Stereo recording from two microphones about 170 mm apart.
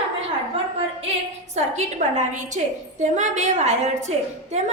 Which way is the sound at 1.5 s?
45° right (ahead or behind).